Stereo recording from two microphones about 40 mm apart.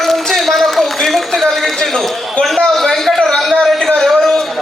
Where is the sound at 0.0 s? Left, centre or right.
Centre.